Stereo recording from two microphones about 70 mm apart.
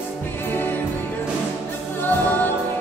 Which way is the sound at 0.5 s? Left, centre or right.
Left.